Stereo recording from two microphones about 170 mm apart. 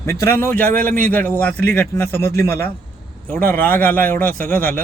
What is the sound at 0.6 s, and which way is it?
Speech, 55° right (ahead or behind).